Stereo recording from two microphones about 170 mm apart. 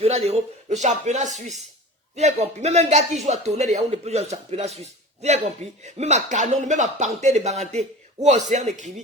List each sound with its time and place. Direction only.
0.0 s speech: 40° right (ahead or behind)